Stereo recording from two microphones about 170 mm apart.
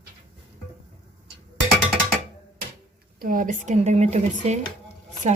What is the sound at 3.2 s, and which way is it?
Speech, 55° right (ahead or behind).